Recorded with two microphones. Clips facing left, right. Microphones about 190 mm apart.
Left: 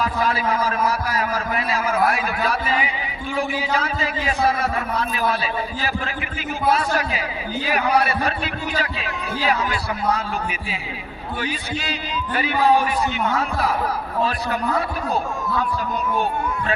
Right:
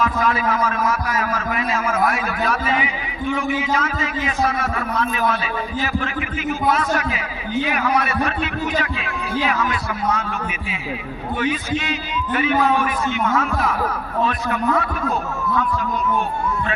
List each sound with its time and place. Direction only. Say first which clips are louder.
0.0 s a man's voice: right 2 dB; 35° left (ahead or behind)
6.7 s a man's voice: right 1 dB; 35° left (ahead or behind)
11.3 s a man's voice: right 5 dB; 35° left (ahead or behind)